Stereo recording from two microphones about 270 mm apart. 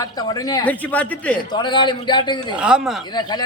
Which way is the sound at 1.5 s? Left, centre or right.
Centre.